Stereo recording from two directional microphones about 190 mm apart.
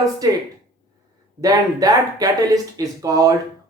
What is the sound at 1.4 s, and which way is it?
Speech, 20° right (ahead or behind).